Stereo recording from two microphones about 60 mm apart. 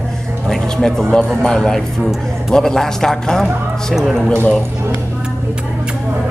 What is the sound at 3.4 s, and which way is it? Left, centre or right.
Speech, centre.